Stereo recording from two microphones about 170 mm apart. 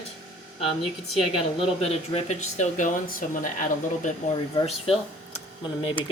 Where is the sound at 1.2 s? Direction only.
35° left (ahead or behind); by 4.1 s 50° left (ahead or behind).